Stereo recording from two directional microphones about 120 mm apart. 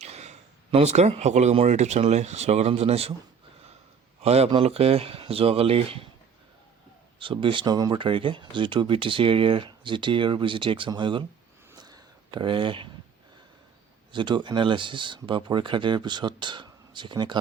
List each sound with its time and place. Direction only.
0.0 s speech: 65° right (ahead or behind)
4.2 s speech: 60° right (ahead or behind)
7.2 s speech: 45° right (ahead or behind)
7.9 s speech: 45° right (ahead or behind)
11.8 s a sound: 40° right (ahead or behind)
14.1 s speech: 40° right (ahead or behind)